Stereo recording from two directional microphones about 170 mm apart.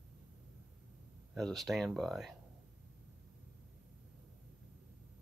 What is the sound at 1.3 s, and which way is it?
Speech, centre (ahead or behind).